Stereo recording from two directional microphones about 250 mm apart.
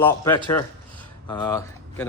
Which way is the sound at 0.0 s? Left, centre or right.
Centre.